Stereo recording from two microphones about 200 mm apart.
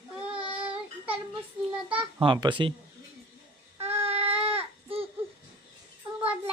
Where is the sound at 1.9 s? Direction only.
25° right (ahead or behind).